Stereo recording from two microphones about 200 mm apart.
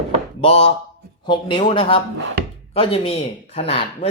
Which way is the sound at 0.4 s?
30° left (ahead or behind).